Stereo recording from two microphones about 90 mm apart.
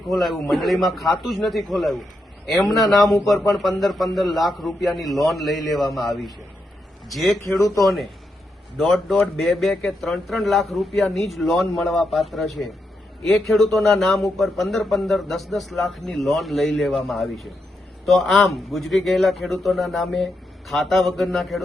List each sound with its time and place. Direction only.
0.1 s speech: centre (ahead or behind)
7.4 s speech: 30° left (ahead or behind)
7.8 s speech: centre (ahead or behind)